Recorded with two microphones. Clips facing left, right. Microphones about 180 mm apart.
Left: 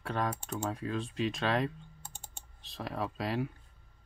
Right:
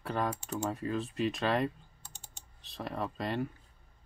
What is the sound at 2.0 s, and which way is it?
Typing, 50° left (ahead or behind).